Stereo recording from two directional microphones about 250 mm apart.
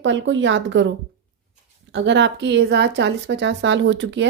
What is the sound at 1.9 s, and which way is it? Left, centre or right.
Speech, right.